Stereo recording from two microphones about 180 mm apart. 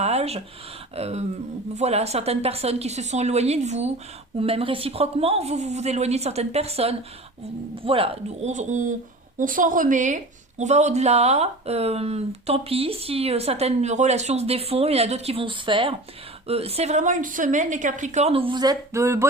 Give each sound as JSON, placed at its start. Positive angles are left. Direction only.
{"t": 0.0, "sound": "a woman's voice", "side_deg": -35}